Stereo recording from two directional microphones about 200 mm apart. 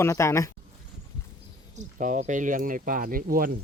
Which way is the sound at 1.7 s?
35° right (ahead or behind).